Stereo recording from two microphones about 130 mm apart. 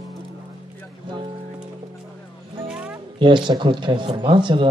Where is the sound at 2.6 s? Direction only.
5° right (ahead or behind).